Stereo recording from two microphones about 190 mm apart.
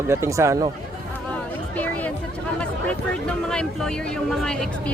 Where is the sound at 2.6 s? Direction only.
5° left (ahead or behind).